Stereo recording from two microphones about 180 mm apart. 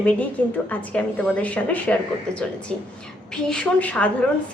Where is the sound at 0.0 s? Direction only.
10° left (ahead or behind).